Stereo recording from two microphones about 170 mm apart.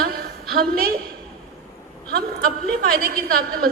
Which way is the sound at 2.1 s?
65° right (ahead or behind).